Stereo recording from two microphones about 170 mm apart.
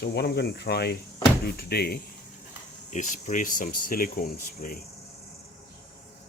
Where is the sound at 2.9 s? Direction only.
45° left (ahead or behind).